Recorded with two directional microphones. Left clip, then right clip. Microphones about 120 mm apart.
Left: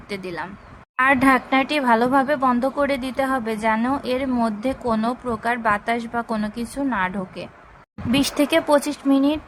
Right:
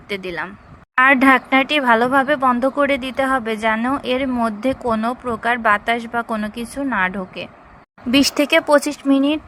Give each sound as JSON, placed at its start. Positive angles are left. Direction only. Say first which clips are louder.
{"t": 0.1, "sound": "speech", "louder": "right 4 dB", "side_deg": -40}
{"t": 3.8, "sound": "a woman's voice", "louder": "right 2 dB", "side_deg": -20}
{"t": 4.0, "sound": "speech", "louder": "right 3 dB", "side_deg": -35}
{"t": 8.2, "sound": "speech", "louder": "right 3 dB", "side_deg": -50}